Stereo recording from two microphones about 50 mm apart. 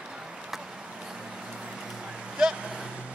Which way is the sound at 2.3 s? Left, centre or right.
Centre.